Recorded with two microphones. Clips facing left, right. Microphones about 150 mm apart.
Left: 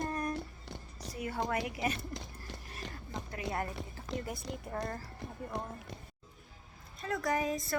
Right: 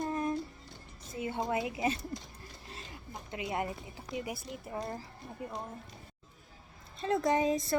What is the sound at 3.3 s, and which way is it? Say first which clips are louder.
Speech: right 2 dB; 20° right (ahead or behind).